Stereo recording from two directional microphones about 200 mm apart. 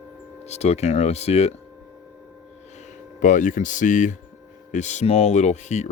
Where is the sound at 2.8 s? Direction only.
40° left (ahead or behind).